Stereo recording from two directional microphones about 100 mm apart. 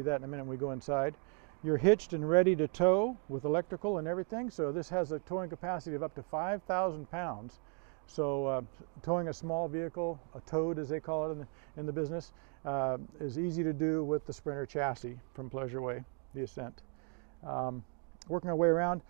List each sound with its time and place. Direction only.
0.0 s speech: 15° left (ahead or behind)